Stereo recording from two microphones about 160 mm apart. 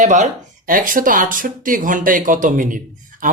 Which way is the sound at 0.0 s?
55° right (ahead or behind).